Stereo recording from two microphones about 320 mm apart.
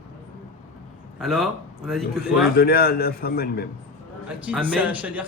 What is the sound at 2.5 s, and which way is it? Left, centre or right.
A man's voice, left.